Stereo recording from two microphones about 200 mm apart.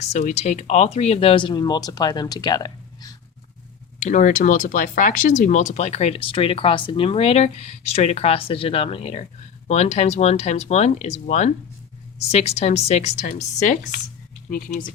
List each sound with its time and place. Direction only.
0.1 s speech: 35° left (ahead or behind); by 3.2 s 20° left (ahead or behind)
4.0 s speech: 40° left (ahead or behind)